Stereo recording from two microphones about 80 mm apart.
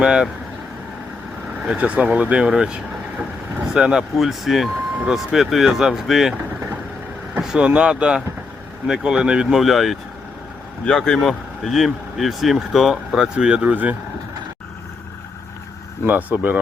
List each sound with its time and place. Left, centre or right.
0.0 s speech: centre
1.6 s speech: centre
7.3 s speech: centre
16.0 s speech: right